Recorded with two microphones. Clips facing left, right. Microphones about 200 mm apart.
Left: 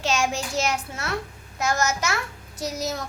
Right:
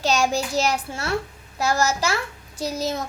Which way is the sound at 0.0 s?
35° right (ahead or behind).